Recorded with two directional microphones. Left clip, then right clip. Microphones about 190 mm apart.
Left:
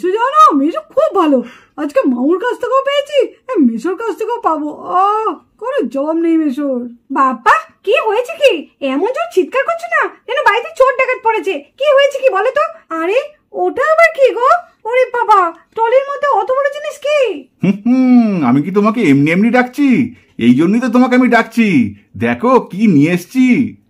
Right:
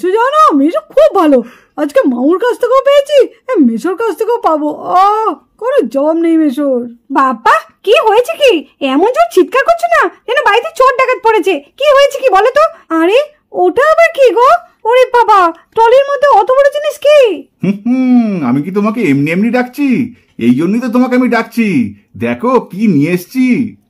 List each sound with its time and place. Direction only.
0.0 s a sound: 40° right (ahead or behind)
1.8 s speech: 40° right (ahead or behind); by 17.4 s 65° right (ahead or behind)
17.6 s speech: centre (ahead or behind)